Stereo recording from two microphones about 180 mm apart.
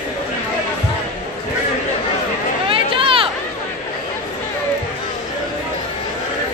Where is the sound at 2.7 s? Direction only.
30° right (ahead or behind).